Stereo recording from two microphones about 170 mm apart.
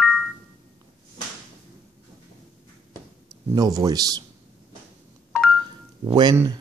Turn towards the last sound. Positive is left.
turn(degrees=-20)  # may be behind; listen again after turning